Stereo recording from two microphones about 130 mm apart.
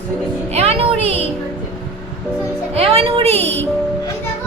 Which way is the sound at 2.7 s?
50° right (ahead or behind).